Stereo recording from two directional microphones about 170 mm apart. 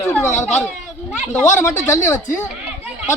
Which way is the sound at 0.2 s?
15° left (ahead or behind).